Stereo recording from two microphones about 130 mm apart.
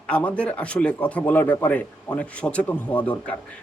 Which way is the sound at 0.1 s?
10° left (ahead or behind).